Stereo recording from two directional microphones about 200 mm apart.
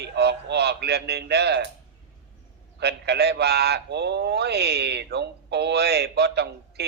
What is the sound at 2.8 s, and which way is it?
A man's voice, 55° right (ahead or behind).